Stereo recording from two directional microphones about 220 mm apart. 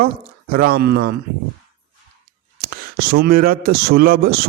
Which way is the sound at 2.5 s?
40° right (ahead or behind).